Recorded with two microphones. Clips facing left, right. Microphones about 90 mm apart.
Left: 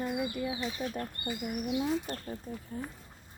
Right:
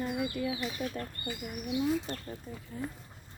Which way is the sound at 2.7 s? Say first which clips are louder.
Right 2 dB; 40° left (ahead or behind).